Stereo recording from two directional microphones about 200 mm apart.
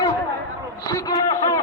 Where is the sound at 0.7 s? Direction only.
15° left (ahead or behind).